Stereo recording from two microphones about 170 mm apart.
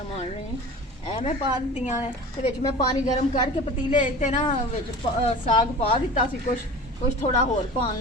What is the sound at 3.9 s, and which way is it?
A woman's voice, 45° left (ahead or behind).